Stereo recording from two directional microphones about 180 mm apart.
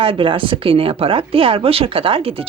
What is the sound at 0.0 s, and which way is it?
Speech, 30° right (ahead or behind).